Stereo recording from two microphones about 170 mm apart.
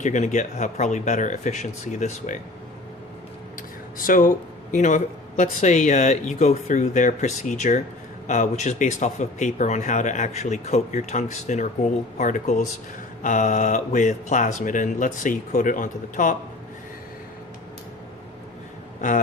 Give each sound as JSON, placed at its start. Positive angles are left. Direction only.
{"t": 0.0, "sound": "speech", "side_deg": 45}
{"t": 3.9, "sound": "speech", "side_deg": 55}
{"t": 19.0, "sound": "speech", "side_deg": 45}